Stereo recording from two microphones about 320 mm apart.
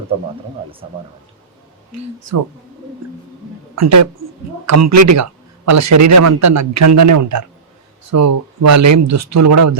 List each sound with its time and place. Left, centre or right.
1.9 s speech: right
3.8 s speech: right